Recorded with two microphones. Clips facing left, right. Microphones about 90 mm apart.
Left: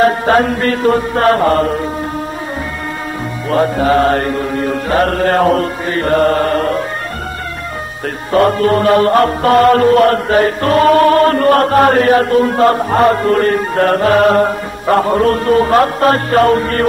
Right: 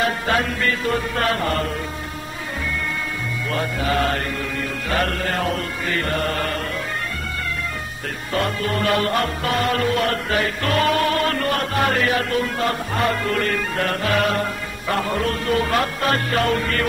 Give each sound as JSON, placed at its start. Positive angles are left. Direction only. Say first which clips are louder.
{"t": 0.0, "sound": "music", "louder": "left 10 dB", "side_deg": 40}
{"t": 3.4, "sound": "music", "louder": "left 12 dB", "side_deg": 40}
{"t": 8.3, "sound": "music", "louder": "left 12 dB", "side_deg": 45}